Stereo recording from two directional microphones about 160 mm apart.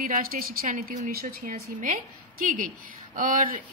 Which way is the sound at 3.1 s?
60° right (ahead or behind).